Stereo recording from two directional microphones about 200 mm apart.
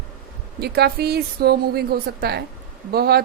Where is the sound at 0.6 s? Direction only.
55° right (ahead or behind).